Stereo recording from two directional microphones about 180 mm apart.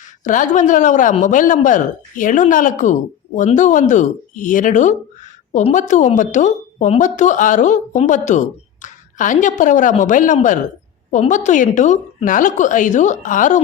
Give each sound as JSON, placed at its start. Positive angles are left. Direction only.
{"t": 0.3, "sound": "speech", "side_deg": 45}